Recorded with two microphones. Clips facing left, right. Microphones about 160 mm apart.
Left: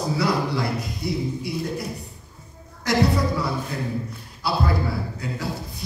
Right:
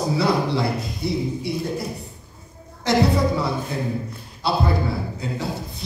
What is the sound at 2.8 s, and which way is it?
A man's voice, 25° right (ahead or behind).